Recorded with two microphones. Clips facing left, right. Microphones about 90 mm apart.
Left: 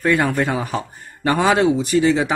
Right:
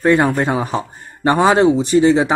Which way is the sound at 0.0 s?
30° right (ahead or behind).